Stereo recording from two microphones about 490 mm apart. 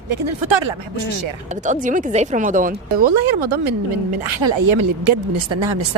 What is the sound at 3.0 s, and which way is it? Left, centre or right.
Speech, right.